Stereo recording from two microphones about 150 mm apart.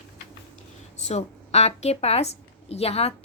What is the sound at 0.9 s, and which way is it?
A woman's voice, 45° left (ahead or behind).